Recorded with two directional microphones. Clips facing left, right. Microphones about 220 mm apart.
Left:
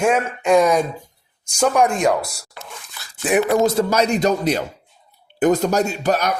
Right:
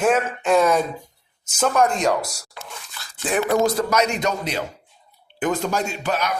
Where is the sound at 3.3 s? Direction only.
25° left (ahead or behind).